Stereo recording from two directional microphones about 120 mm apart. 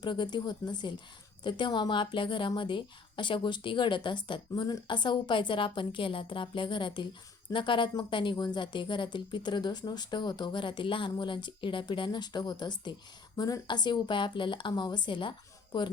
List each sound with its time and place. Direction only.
0.0 s a woman's voice: 40° left (ahead or behind)